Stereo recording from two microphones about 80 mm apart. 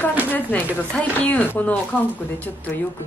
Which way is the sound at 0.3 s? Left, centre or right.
Left.